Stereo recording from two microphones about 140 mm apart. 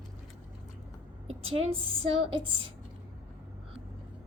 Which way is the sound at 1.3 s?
45° right (ahead or behind).